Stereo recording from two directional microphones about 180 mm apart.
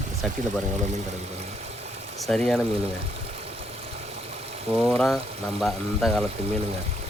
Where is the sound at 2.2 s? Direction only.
Centre (ahead or behind).